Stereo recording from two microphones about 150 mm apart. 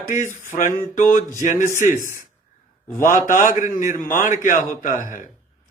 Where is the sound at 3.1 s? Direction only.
60° left (ahead or behind).